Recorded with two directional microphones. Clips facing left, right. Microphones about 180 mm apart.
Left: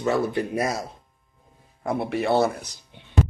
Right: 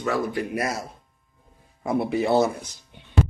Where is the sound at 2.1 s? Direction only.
Centre (ahead or behind).